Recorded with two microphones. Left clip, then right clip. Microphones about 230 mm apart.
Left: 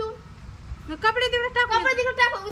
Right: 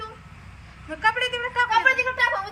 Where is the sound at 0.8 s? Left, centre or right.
Centre.